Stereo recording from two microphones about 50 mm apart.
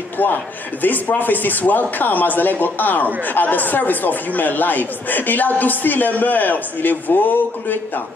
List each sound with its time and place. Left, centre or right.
0.2 s speech: left